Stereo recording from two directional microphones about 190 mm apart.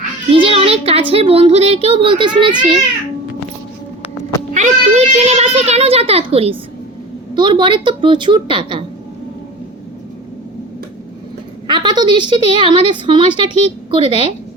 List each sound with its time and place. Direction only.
0.3 s a sound: 30° right (ahead or behind)
1.1 s a child's voice: 30° right (ahead or behind)
4.5 s a child's voice: 40° right (ahead or behind)
11.7 s a child's voice: 25° right (ahead or behind)